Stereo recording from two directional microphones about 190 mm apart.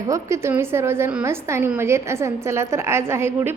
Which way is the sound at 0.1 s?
15° right (ahead or behind).